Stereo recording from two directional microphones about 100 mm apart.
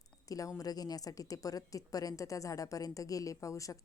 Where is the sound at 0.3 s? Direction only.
35° left (ahead or behind).